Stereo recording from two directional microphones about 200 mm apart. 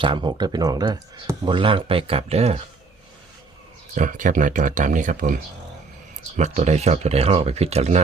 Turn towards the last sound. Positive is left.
turn(degrees=-35)  # may be behind; listen again after turning